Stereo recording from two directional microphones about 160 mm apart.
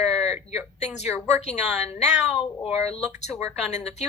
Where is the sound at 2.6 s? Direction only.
5° left (ahead or behind).